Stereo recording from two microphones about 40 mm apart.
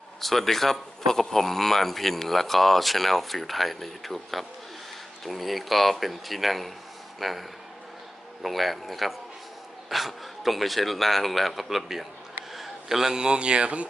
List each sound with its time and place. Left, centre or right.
0.2 s a man's voice: centre; by 13.8 s right